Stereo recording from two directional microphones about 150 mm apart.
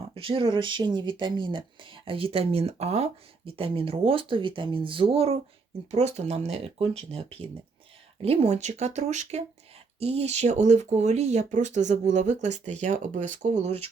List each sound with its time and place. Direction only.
0.1 s speech: 35° right (ahead or behind)